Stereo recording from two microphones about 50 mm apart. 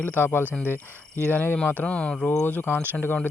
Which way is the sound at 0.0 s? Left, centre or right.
Left.